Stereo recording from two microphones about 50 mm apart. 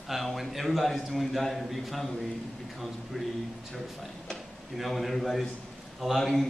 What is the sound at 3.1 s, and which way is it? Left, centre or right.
Speech, centre.